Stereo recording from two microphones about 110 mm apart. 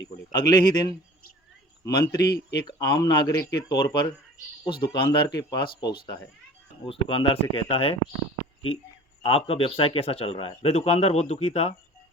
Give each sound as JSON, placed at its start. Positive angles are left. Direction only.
{"t": 0.3, "sound": "speech", "side_deg": 40}
{"t": 6.8, "sound": "a man's voice", "side_deg": 55}
{"t": 9.2, "sound": "a man's voice", "side_deg": 60}
{"t": 10.7, "sound": "speech", "side_deg": 80}